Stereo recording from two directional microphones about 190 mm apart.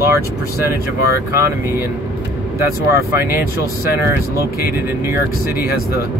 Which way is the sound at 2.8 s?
15° right (ahead or behind).